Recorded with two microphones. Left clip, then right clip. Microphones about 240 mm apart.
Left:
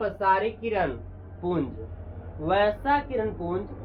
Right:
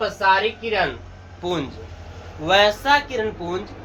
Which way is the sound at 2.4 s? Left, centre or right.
Right.